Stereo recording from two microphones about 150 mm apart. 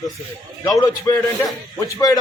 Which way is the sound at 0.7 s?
25° left (ahead or behind).